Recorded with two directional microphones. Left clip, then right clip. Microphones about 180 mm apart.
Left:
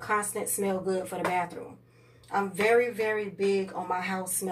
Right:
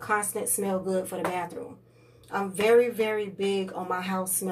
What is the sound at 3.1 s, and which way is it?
Speech, 15° left (ahead or behind).